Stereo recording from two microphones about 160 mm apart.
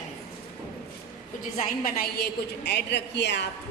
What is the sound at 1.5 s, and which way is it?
A woman's voice, 55° left (ahead or behind).